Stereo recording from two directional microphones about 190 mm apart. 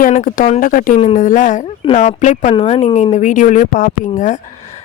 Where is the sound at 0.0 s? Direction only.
40° left (ahead or behind).